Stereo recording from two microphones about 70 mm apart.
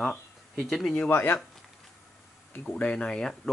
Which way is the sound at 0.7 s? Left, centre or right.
Centre.